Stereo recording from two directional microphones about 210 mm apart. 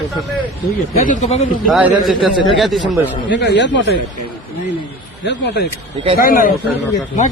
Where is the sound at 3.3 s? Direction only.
55° left (ahead or behind).